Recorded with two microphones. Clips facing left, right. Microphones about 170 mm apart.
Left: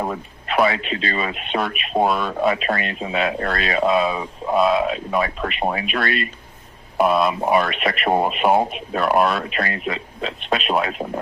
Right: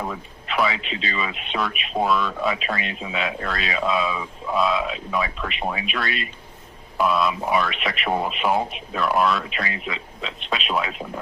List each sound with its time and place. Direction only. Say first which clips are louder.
0.0 s speech: left 5 dB; 45° left (ahead or behind)